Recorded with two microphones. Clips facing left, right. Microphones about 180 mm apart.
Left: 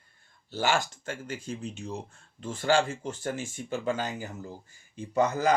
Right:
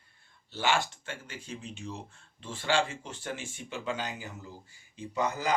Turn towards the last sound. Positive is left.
turn(degrees=45)  # may be behind; listen again after turning